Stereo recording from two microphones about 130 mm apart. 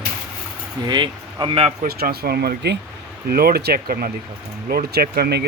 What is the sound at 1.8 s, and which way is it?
Speech, 90° right.